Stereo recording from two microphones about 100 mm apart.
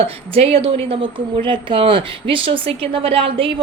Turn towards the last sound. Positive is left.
turn(degrees=-65)  # may be behind; listen again after turning